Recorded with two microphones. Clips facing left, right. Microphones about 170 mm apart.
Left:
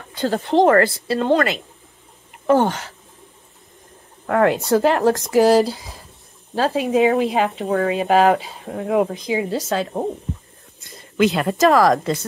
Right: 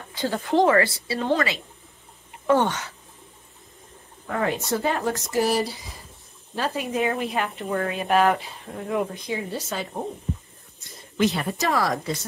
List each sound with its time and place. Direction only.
0.7 s a woman's voice: 50° left (ahead or behind)
4.3 s speech: 65° left (ahead or behind); by 10.0 s 90° left
11.3 s speech: 80° left